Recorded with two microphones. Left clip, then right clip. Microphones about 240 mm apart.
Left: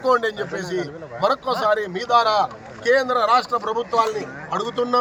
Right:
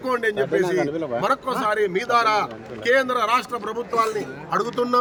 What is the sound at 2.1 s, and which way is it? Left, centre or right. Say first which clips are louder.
Speech: left 3 dB; centre.